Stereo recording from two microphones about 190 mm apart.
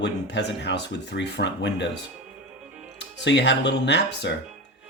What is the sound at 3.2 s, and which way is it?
Speech, 65° left (ahead or behind).